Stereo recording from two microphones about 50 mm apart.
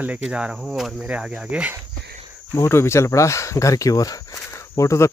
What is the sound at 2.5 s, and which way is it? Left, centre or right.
Speech, left.